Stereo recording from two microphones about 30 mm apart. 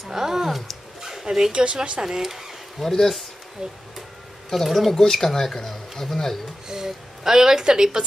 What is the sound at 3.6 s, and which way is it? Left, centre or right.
Speech, right.